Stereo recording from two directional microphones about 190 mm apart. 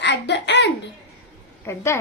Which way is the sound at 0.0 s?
65° left (ahead or behind).